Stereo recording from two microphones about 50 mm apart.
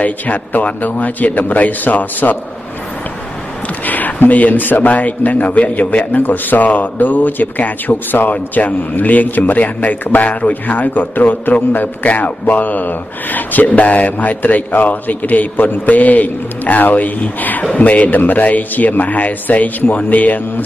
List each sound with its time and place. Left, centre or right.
0.0 s a man's voice: left
3.8 s a man's voice: left